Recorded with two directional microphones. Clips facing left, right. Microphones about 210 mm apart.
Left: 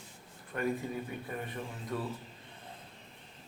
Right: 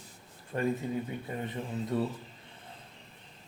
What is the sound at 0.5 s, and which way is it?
Speech, 30° right (ahead or behind).